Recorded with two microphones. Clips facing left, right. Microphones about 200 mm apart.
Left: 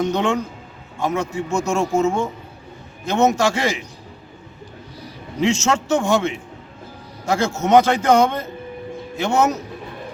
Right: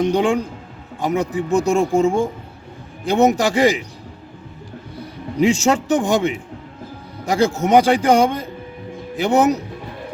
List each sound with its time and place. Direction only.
0.0 s a man's voice: 10° right (ahead or behind)
1.7 s speech: 30° right (ahead or behind)
3.0 s a man's voice: 15° right (ahead or behind)
5.4 s a man's voice: 15° right (ahead or behind)